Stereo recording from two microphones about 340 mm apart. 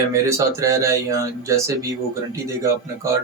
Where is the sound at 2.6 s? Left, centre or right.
Centre.